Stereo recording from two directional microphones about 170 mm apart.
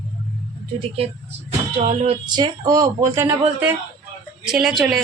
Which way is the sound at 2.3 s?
25° right (ahead or behind).